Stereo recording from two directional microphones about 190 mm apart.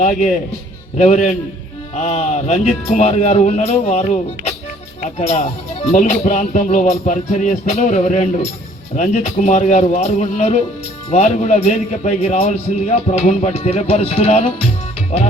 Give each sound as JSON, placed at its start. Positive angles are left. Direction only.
{"t": 0.0, "sound": "speech", "side_deg": 40}